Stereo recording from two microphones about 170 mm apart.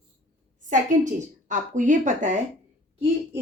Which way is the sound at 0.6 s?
50° right (ahead or behind).